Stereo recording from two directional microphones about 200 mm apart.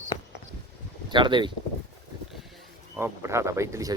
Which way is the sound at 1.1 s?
25° right (ahead or behind).